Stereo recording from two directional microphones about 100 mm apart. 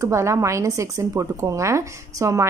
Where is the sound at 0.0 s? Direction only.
30° right (ahead or behind).